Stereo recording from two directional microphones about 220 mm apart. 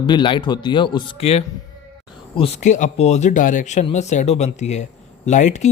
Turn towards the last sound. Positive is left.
turn(degrees=30)  # may be behind; listen again after turning